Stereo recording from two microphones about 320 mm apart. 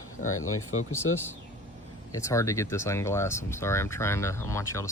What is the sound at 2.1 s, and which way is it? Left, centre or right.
Speech, centre.